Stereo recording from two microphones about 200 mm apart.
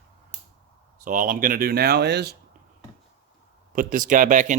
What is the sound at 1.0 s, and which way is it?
Speech, 40° right (ahead or behind).